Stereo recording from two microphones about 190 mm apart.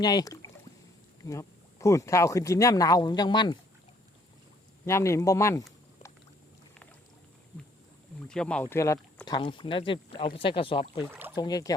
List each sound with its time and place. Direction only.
0.0 s speech: 20° left (ahead or behind)
4.9 s speech: 15° left (ahead or behind)
8.3 s speech: 5° left (ahead or behind); by 11.0 s 25° left (ahead or behind)
11.1 s a sound: 10° right (ahead or behind)
11.3 s speech: 20° left (ahead or behind)